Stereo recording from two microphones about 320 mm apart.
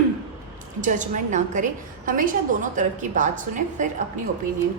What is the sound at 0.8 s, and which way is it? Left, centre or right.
A woman's voice, right.